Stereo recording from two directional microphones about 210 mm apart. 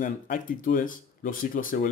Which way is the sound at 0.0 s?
40° left (ahead or behind).